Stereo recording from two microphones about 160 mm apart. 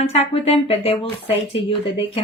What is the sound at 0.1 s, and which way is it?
Speech, 40° left (ahead or behind).